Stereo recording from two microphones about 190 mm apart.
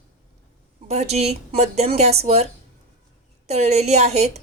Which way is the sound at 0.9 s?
35° right (ahead or behind).